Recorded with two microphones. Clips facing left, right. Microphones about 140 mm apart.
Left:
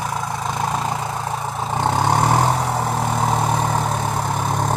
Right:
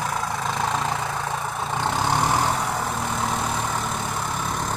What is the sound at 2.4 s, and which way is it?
Vehicle, 30° left (ahead or behind).